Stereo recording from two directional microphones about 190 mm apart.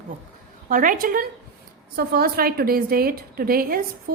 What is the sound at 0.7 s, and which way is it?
A woman's voice, 45° right (ahead or behind).